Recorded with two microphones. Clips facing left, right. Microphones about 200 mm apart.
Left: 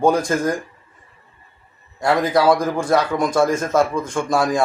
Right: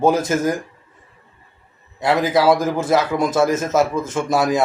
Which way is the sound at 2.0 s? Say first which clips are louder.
Even; 5° right (ahead or behind).